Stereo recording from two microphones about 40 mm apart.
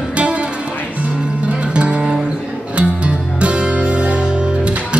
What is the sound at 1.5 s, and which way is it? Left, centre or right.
Music, right.